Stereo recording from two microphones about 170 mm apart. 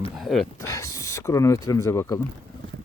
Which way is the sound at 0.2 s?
Centre (ahead or behind).